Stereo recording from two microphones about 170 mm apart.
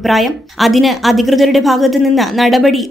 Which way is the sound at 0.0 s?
Centre (ahead or behind).